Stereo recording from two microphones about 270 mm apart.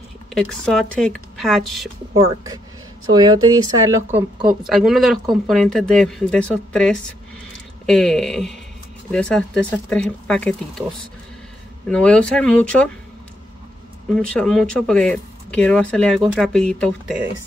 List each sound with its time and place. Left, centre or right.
0.3 s speech: centre
2.1 s speech: centre
11.9 s speech: centre
14.1 s speech: centre